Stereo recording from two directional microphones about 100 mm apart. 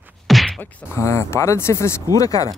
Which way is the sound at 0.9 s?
25° left (ahead or behind).